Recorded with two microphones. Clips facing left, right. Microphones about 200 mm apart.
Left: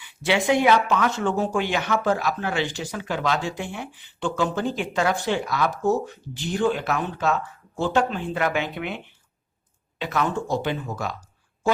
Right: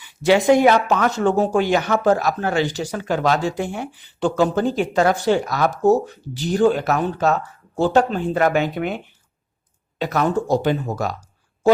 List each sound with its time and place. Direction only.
0.0 s speech: 40° right (ahead or behind)
10.0 s speech: 40° right (ahead or behind)